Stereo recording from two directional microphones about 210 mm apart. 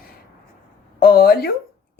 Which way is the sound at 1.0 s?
45° left (ahead or behind).